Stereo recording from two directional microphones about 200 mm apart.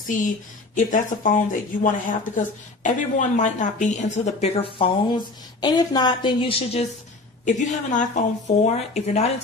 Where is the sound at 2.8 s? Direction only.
40° left (ahead or behind).